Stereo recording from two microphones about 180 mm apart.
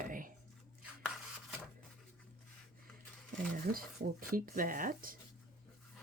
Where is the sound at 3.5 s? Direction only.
50° right (ahead or behind).